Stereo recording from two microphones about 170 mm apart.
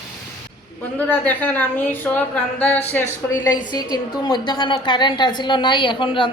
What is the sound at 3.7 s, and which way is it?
A woman's voice, 25° left (ahead or behind).